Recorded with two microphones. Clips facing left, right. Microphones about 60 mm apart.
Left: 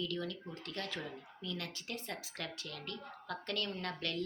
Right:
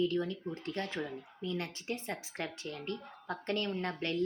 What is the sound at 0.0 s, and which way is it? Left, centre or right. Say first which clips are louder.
A woman's voice: right 7 dB; right.